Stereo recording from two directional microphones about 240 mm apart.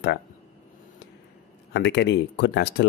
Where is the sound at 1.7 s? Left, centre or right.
Left.